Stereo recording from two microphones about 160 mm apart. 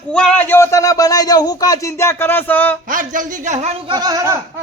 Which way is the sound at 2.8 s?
55° right (ahead or behind).